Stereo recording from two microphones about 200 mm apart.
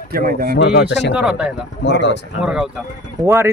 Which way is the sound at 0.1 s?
45° right (ahead or behind).